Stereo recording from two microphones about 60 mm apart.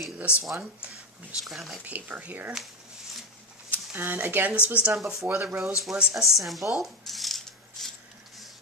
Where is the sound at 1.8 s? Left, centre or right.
Right.